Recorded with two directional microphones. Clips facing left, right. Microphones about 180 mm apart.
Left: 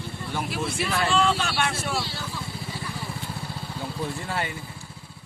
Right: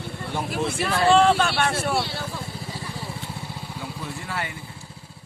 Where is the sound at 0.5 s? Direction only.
50° right (ahead or behind).